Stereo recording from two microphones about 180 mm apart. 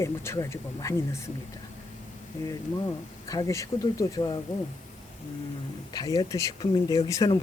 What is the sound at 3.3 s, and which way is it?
Speech, 20° left (ahead or behind).